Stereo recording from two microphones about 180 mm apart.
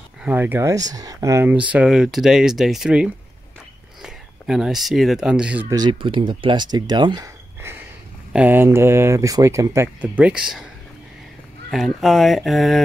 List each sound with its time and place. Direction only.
0.2 s speech: 10° right (ahead or behind)
5.7 s speech: 25° right (ahead or behind)
7.6 s a sound: 15° right (ahead or behind)
8.3 s speech: 10° right (ahead or behind)
11.7 s speech: centre (ahead or behind)